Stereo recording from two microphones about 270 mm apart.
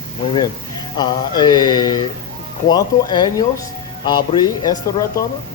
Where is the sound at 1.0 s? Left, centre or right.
Centre.